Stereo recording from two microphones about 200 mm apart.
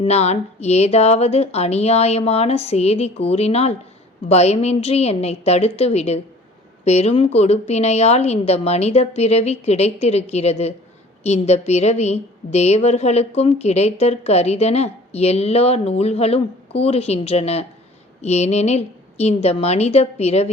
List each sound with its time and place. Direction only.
0.0 s a woman's voice: 30° left (ahead or behind)